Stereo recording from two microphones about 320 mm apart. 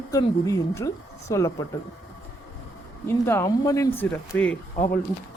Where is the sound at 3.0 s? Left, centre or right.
Centre.